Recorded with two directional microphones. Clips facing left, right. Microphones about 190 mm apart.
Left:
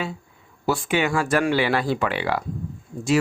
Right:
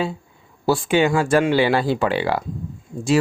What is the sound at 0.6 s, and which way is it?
Speech, 30° right (ahead or behind).